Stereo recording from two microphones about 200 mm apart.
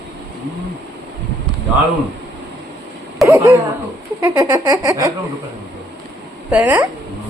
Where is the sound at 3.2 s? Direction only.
15° right (ahead or behind).